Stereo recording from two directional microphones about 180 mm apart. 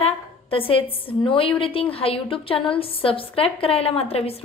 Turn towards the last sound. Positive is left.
turn(degrees=35)  # may be behind; listen again after turning